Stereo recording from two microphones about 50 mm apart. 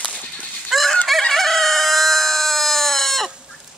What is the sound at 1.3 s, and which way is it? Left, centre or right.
Chicken, centre.